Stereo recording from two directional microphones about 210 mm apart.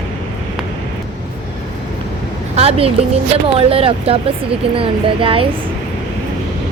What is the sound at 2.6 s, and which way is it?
A woman's voice, 30° right (ahead or behind).